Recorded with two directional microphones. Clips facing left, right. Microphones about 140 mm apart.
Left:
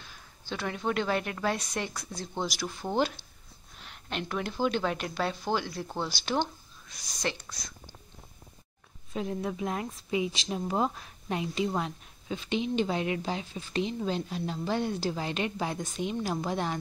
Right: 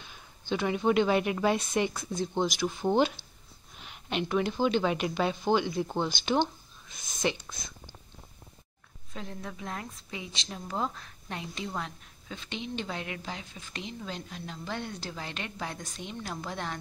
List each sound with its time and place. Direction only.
0.0 s speech: centre (ahead or behind)
2.0 s speech: 20° right (ahead or behind)
3.7 s speech: 5° right (ahead or behind)
5.8 s speech: 15° right (ahead or behind)
6.0 s speech: 5° left (ahead or behind)
9.1 s a woman's voice: 15° left (ahead or behind)